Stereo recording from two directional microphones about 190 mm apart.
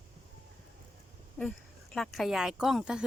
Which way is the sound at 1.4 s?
5° left (ahead or behind).